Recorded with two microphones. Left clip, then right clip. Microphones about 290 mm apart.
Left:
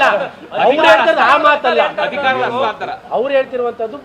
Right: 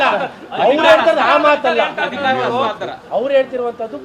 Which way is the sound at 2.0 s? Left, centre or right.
Left.